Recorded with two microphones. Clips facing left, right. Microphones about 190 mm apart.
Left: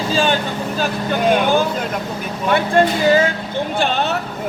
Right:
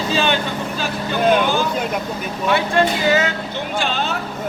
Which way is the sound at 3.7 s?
60° left (ahead or behind).